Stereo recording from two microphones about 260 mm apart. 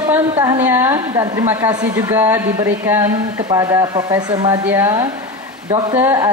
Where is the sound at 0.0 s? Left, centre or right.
Centre.